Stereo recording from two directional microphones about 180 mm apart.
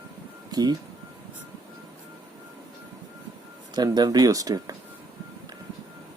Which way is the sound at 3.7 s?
25° right (ahead or behind).